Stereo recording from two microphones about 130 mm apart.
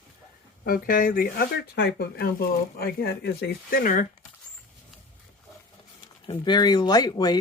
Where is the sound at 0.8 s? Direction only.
90° left.